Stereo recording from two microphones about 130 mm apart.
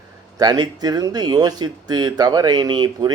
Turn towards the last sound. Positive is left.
turn(degrees=-35)  # may be behind; listen again after turning